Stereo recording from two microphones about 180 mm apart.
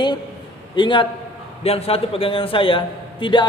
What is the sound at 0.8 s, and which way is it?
A man's voice, 25° left (ahead or behind).